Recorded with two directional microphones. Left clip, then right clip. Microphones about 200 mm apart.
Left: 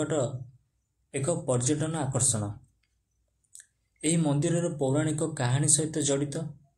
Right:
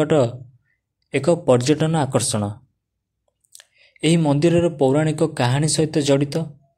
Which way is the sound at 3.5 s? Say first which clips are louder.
Right 9 dB; 35° right (ahead or behind).